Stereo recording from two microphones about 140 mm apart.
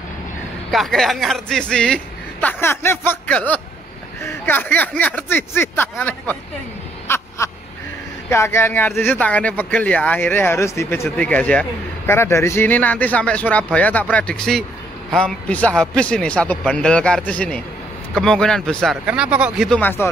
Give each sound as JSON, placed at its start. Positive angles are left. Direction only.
{"t": 0.7, "sound": "speech", "side_deg": 0}
{"t": 2.4, "sound": "speech", "side_deg": 20}
{"t": 7.1, "sound": "crow", "side_deg": 20}
{"t": 8.3, "sound": "speech", "side_deg": 20}
{"t": 19.0, "sound": "speech", "side_deg": -10}
{"t": 19.7, "sound": "speech", "side_deg": 15}